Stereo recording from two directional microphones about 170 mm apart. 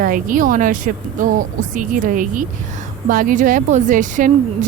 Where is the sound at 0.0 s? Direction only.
55° right (ahead or behind).